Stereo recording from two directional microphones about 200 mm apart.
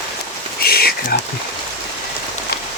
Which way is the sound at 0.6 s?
50° left (ahead or behind).